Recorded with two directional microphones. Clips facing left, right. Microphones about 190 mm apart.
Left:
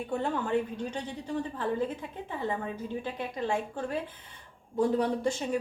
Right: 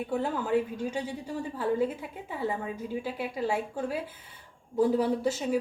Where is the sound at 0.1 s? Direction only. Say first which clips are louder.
Right 1 dB; 5° right (ahead or behind).